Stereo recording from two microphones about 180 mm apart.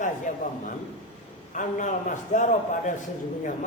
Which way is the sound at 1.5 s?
45° left (ahead or behind).